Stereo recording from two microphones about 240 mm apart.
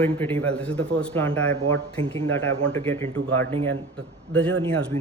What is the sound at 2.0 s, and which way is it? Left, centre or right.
Speech, right.